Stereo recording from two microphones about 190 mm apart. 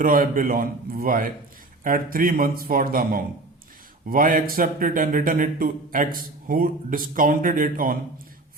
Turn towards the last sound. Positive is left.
turn(degrees=-45)  # may be behind; listen again after turning